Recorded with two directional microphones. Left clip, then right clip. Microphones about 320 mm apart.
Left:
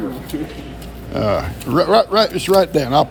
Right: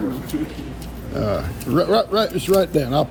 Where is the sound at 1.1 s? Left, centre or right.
Centre.